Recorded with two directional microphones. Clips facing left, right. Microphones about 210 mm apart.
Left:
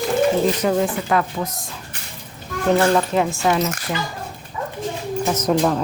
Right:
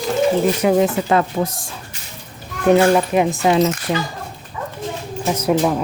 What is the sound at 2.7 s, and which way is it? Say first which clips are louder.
Speech: right 4 dB; 15° right (ahead or behind).